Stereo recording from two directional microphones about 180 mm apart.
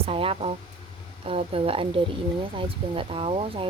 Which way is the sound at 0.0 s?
30° right (ahead or behind).